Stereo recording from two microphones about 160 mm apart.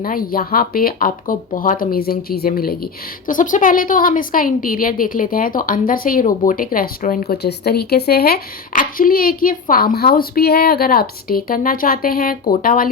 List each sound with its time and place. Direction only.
0.0 s speech: 65° left (ahead or behind)